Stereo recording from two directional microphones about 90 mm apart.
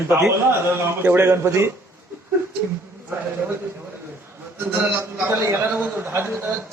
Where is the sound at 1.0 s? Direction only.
25° right (ahead or behind).